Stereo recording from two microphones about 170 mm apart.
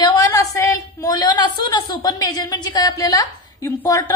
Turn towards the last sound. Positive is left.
turn(degrees=20)  # may be behind; listen again after turning